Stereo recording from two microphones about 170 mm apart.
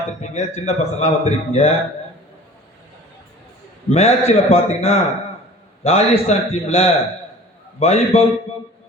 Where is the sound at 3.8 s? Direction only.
40° left (ahead or behind).